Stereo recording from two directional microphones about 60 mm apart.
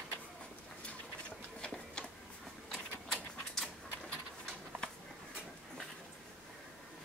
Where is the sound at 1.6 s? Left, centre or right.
Centre.